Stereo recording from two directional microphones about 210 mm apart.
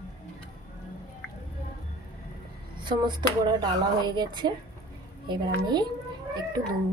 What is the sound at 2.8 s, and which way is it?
Speech, 20° right (ahead or behind).